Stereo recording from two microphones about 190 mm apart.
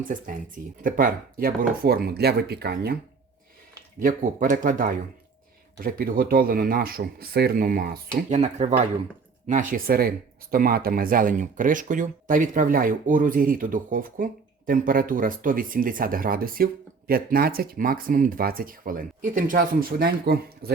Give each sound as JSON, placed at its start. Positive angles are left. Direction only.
{"t": 0.8, "sound": "speech", "side_deg": -45}
{"t": 4.0, "sound": "speech", "side_deg": -40}